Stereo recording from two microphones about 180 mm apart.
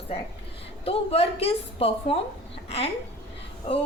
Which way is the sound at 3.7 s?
30° left (ahead or behind).